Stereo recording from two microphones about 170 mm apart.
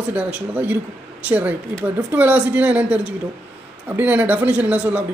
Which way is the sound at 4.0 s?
10° right (ahead or behind).